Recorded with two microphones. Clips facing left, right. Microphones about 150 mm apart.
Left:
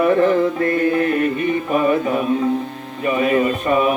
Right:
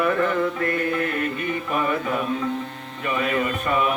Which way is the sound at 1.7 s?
25° left (ahead or behind).